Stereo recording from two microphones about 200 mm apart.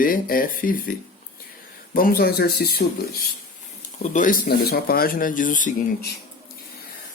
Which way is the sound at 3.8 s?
40° left (ahead or behind).